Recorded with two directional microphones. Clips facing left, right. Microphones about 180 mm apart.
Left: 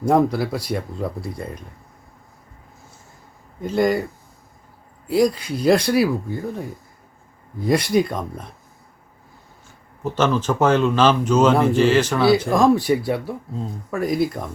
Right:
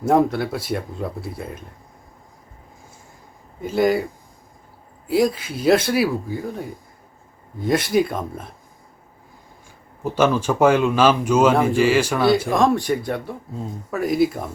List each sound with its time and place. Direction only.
0.0 s speech: centre (ahead or behind)
3.6 s speech: 5° right (ahead or behind)
5.0 s speech: centre (ahead or behind)
10.0 s a man's voice: 10° right (ahead or behind)